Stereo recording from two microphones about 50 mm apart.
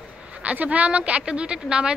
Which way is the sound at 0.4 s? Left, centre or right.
Right.